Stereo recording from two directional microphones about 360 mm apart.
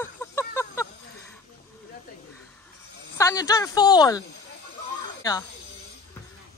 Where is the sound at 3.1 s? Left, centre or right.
Centre.